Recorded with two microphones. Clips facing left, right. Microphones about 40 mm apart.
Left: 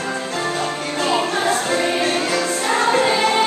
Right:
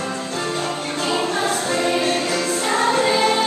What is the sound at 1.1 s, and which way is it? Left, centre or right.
Music, centre.